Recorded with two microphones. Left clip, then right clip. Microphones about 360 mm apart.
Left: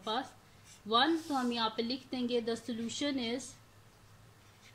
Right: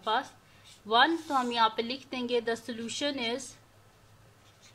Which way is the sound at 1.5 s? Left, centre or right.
Right.